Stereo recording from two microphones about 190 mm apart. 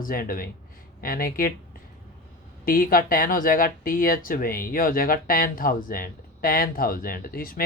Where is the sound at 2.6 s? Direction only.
50° left (ahead or behind).